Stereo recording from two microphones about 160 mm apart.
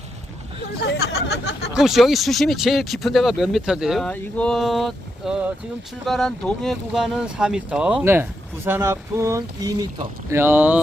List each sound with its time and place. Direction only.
0.8 s speech: 90° left
1.7 s speech: centre (ahead or behind)